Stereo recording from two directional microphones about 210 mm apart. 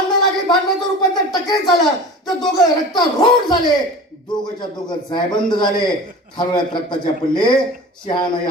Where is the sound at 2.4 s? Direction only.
20° left (ahead or behind).